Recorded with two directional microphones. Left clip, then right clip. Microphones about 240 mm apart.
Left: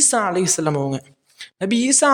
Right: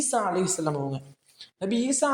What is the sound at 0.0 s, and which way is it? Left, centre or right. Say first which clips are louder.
A woman's voice: left 7 dB; left.